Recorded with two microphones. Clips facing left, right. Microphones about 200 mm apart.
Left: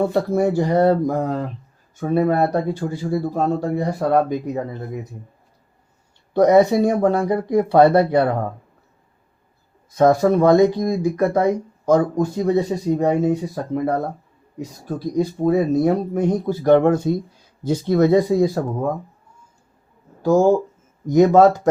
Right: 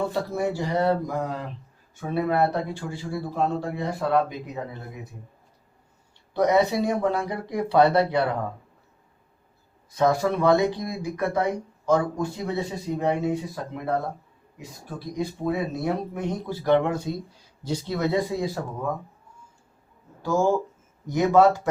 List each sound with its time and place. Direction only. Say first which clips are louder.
0.0 s speech: left 8 dB; 50° left (ahead or behind)
6.3 s speech: left 7 dB; 45° left (ahead or behind)
9.9 s speech: left 7 dB; 45° left (ahead or behind)
20.2 s speech: left 7 dB; 45° left (ahead or behind)